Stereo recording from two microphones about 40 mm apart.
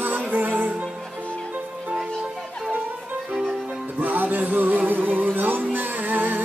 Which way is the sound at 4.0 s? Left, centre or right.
Right.